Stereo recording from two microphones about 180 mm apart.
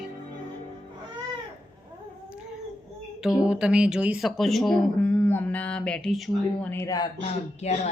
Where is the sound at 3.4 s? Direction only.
5° right (ahead or behind).